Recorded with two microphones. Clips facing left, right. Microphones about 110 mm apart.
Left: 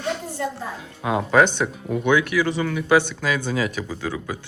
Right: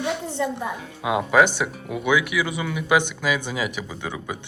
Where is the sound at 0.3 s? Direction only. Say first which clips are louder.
Right 2 dB; 20° right (ahead or behind).